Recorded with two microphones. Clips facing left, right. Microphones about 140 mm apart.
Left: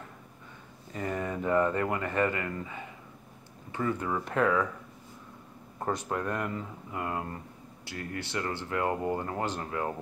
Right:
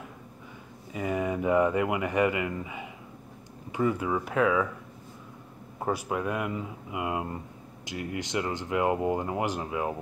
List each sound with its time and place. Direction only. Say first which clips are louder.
0.9 s speech: right 4 dB; 10° right (ahead or behind)
5.8 s speech: right 2 dB; 10° right (ahead or behind)